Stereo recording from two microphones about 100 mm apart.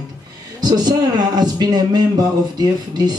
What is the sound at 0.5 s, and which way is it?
Speech, 45° right (ahead or behind).